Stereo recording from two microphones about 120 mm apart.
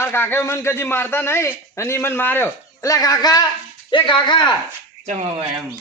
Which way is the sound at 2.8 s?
30° left (ahead or behind).